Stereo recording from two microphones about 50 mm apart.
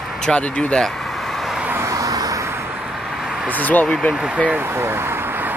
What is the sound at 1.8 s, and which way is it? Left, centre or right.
Vehicle, right.